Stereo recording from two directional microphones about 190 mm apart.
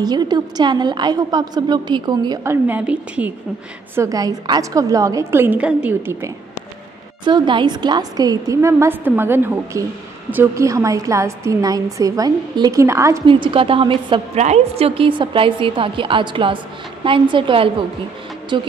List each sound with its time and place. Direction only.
0.0 s a woman's voice: 20° right (ahead or behind)
7.2 s a woman's voice: 25° right (ahead or behind)
13.3 s a woman's voice: 25° right (ahead or behind)